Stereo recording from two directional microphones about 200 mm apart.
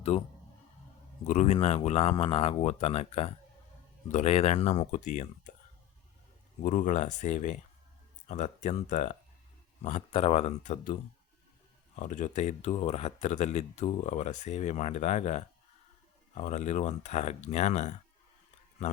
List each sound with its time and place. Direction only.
1.2 s speech: 35° left (ahead or behind)
6.7 s speech: 40° left (ahead or behind)
11.9 s speech: 40° left (ahead or behind)